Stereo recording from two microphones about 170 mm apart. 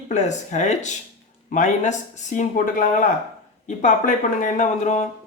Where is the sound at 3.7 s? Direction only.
45° left (ahead or behind).